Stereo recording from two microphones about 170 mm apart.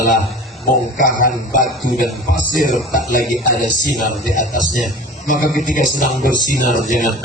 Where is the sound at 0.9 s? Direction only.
50° left (ahead or behind).